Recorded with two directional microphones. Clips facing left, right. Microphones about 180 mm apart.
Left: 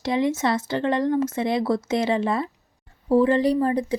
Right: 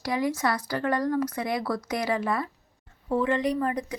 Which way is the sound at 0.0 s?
25° left (ahead or behind).